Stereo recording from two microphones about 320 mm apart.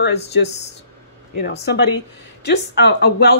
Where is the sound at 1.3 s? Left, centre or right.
Left.